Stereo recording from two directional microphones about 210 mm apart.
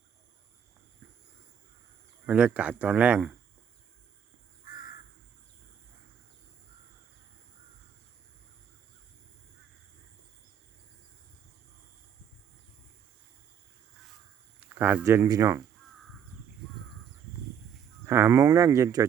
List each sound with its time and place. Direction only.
2.2 s speech: 5° right (ahead or behind)
4.6 s crow: 40° left (ahead or behind)
14.7 s speech: 10° right (ahead or behind)
18.0 s speech: 15° right (ahead or behind)